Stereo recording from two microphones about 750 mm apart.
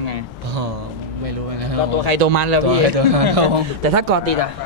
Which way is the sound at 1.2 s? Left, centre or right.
Right.